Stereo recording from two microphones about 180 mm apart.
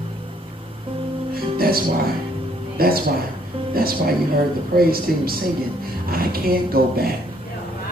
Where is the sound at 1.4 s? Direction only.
55° right (ahead or behind).